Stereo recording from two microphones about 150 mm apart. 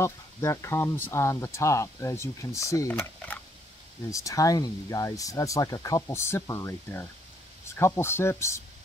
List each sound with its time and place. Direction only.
0.0 s speech: 20° left (ahead or behind)
2.9 s speech: 10° left (ahead or behind)
4.1 s speech: 20° left (ahead or behind)